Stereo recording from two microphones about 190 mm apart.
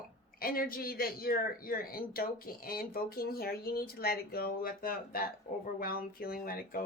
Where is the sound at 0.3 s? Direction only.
50° left (ahead or behind).